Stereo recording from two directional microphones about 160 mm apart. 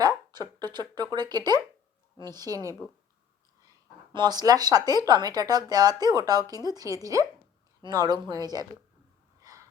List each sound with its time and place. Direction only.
0.3 s speech: 25° right (ahead or behind)
2.8 s speech: centre (ahead or behind)
4.1 s speech: 25° right (ahead or behind)
9.4 s gasp: 20° right (ahead or behind)